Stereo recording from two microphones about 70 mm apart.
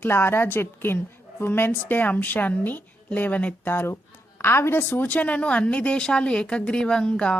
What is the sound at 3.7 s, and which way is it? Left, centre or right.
A woman's voice, left.